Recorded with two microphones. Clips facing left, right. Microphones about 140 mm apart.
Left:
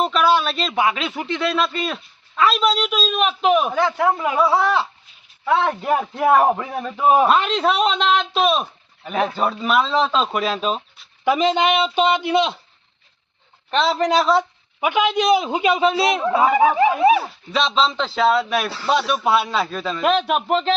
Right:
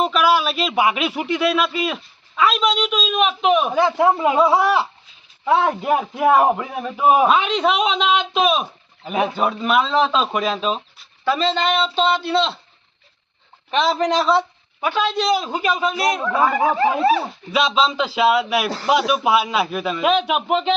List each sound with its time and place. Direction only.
0.0 s a man's voice: 5° right (ahead or behind)
3.7 s a man's voice: 20° right (ahead or behind); by 11.0 s centre (ahead or behind)
11.3 s a man's voice: 15° left (ahead or behind)
13.7 s a man's voice: centre (ahead or behind)
14.8 s a man's voice: 15° left (ahead or behind)
17.5 s a man's voice: 10° right (ahead or behind)